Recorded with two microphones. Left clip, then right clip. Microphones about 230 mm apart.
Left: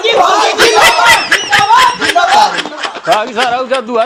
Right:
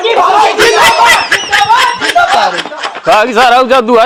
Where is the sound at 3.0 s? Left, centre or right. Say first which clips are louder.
Right 6 dB; right.